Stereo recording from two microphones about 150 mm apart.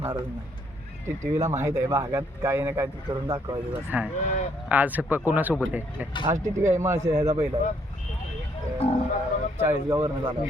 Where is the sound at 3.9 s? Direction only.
10° right (ahead or behind).